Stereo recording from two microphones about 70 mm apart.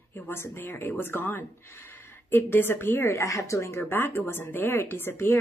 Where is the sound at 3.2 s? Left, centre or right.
Left.